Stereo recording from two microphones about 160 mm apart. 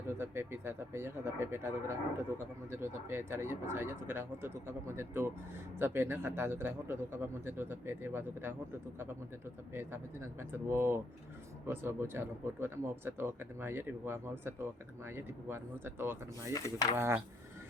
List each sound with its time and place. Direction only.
0.2 s speech: 15° right (ahead or behind)
9.7 s speech: 15° right (ahead or behind)
16.5 s speech: 20° left (ahead or behind)